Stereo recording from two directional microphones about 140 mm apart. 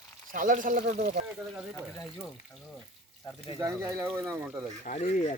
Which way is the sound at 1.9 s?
20° left (ahead or behind).